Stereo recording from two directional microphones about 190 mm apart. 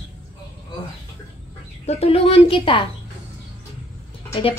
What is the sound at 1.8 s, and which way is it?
A woman's voice, 30° left (ahead or behind).